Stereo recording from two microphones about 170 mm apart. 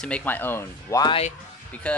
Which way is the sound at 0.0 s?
10° left (ahead or behind).